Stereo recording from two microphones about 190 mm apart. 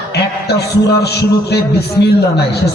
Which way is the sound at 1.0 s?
60° left (ahead or behind).